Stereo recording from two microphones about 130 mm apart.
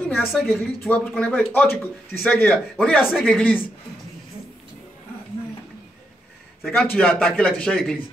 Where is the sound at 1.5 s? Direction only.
15° left (ahead or behind).